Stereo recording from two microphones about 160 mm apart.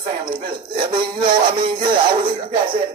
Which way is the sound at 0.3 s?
30° right (ahead or behind).